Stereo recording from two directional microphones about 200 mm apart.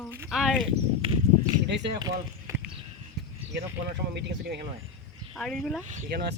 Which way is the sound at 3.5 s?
60° right (ahead or behind).